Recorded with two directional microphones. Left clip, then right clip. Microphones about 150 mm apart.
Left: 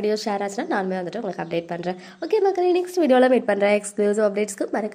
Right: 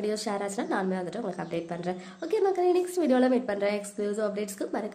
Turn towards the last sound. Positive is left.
turn(degrees=40)  # may be behind; listen again after turning